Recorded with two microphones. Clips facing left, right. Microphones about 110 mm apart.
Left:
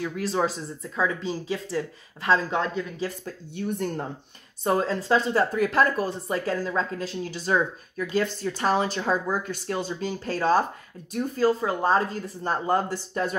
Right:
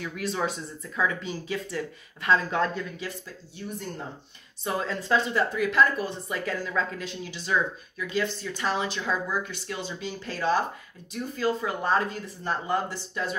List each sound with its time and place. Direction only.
0.0 s speech: 30° left (ahead or behind)
3.5 s speech: 60° left (ahead or behind)
4.6 s speech: 40° left (ahead or behind)